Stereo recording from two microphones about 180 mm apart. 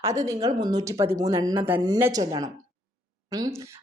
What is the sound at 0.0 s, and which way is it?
A woman's voice, 15° right (ahead or behind).